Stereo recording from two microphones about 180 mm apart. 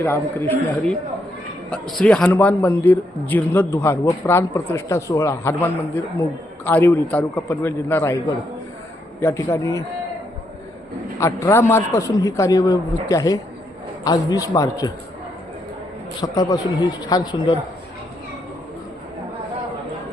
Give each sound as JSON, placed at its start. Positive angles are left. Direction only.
{"t": 0.0, "sound": "a man's voice", "side_deg": 10}
{"t": 6.7, "sound": "a man's voice", "side_deg": 10}
{"t": 9.2, "sound": "a man's voice", "side_deg": 15}
{"t": 11.2, "sound": "a man's voice", "side_deg": 15}
{"t": 16.2, "sound": "a man's voice", "side_deg": 20}